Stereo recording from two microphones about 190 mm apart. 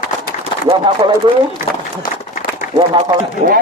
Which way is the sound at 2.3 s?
45° left (ahead or behind).